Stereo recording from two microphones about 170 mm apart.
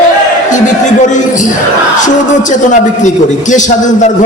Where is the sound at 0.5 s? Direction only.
45° left (ahead or behind).